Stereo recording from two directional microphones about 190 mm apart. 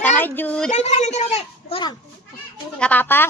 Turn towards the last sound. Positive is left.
turn(degrees=10)  # may be behind; listen again after turning